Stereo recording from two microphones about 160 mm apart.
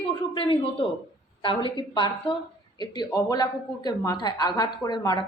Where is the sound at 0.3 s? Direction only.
35° left (ahead or behind).